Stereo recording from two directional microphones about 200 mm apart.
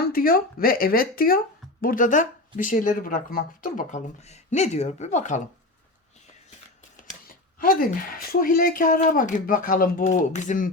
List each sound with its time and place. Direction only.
0.0 s speech: 45° left (ahead or behind)
7.3 s speech: 45° left (ahead or behind)